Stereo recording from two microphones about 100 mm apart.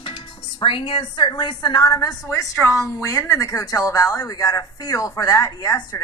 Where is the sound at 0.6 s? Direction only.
60° left (ahead or behind); by 2.1 s 40° left (ahead or behind).